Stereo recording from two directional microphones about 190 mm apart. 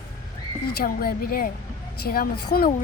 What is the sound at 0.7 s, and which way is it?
Speech, 55° left (ahead or behind).